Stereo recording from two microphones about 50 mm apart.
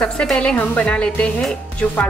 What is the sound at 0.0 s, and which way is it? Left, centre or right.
A woman's voice, centre.